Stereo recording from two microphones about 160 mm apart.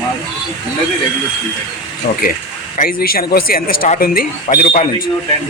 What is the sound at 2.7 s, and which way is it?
Speech, 65° left (ahead or behind).